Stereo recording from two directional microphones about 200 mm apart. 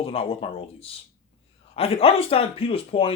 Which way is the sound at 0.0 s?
30° left (ahead or behind).